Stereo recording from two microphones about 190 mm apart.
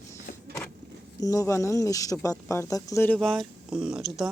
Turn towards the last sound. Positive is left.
turn(degrees=-5)  # may be behind; listen again after turning